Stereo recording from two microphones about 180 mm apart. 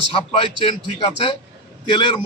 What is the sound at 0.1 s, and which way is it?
A man's voice, 30° left (ahead or behind).